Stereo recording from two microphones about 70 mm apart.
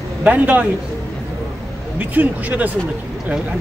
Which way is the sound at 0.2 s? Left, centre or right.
Right.